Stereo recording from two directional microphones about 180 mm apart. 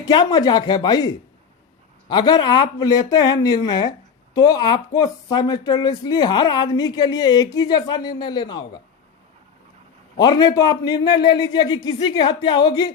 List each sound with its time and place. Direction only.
0.0 s speech: 25° left (ahead or behind)
10.2 s speech: 20° left (ahead or behind)